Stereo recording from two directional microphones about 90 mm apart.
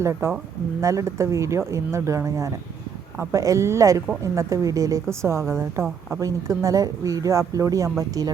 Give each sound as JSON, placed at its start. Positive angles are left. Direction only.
{"t": 0.0, "sound": "speech", "side_deg": -30}